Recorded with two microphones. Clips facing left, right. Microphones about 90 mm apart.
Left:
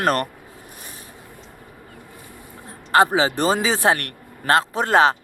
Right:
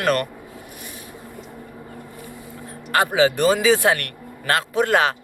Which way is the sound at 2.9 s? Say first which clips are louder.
Left 1 dB; 30° left (ahead or behind).